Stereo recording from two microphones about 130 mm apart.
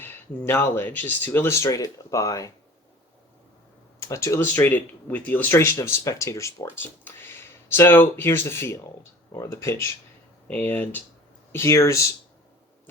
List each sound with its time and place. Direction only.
0.0 s speech: 15° left (ahead or behind)
4.0 s speech: 25° left (ahead or behind)